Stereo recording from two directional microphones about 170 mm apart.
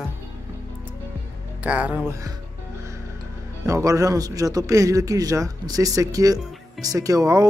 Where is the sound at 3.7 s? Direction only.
20° right (ahead or behind).